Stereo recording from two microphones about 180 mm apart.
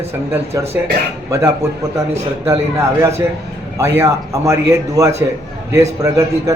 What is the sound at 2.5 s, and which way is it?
A man's voice, 15° right (ahead or behind).